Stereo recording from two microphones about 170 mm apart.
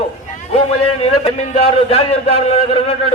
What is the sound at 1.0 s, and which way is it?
A man's voice, 35° left (ahead or behind).